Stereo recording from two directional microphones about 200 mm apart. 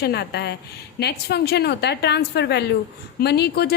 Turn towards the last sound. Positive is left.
turn(degrees=55)  # may be behind; listen again after turning